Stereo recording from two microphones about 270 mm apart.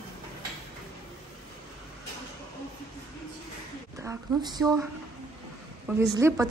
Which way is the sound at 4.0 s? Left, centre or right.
Centre.